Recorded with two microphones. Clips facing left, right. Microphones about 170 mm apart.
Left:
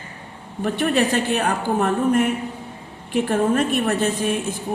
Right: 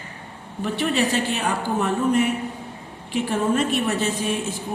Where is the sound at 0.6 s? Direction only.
50° left (ahead or behind).